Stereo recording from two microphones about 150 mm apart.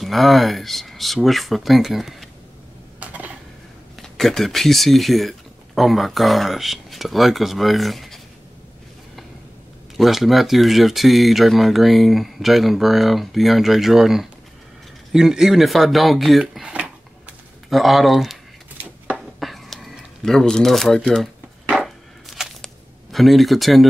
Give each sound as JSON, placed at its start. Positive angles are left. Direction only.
{"t": 0.0, "sound": "speech", "side_deg": 0}
{"t": 3.0, "sound": "dishes", "side_deg": -10}
{"t": 4.0, "sound": "speech", "side_deg": 0}
{"t": 9.9, "sound": "speech", "side_deg": 0}
{"t": 17.6, "sound": "a sound", "side_deg": 0}
{"t": 19.4, "sound": "shuffling cards", "side_deg": 0}
{"t": 23.1, "sound": "speech", "side_deg": 0}